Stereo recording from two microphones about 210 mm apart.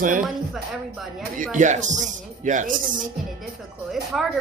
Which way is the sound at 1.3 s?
40° right (ahead or behind).